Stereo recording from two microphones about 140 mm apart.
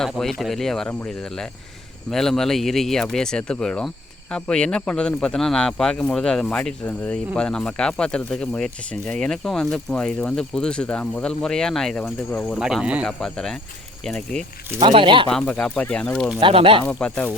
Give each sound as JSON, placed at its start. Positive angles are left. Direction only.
{"t": 0.0, "sound": "speech", "side_deg": 0}
{"t": 12.4, "sound": "speech", "side_deg": 0}
{"t": 13.1, "sound": "speech", "side_deg": 5}
{"t": 14.9, "sound": "speech", "side_deg": -35}
{"t": 15.3, "sound": "speech", "side_deg": 5}
{"t": 16.4, "sound": "speech", "side_deg": -40}
{"t": 16.8, "sound": "speech", "side_deg": 10}